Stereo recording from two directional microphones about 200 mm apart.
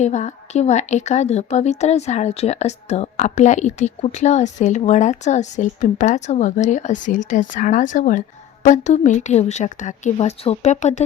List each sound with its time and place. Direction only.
0.0 s a woman's voice: 35° left (ahead or behind)